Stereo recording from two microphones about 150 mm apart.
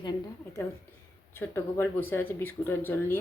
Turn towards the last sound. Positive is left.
turn(degrees=15)  # may be behind; listen again after turning